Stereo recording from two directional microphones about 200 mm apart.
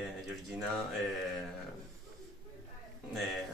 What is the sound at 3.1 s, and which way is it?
Speech, centre (ahead or behind).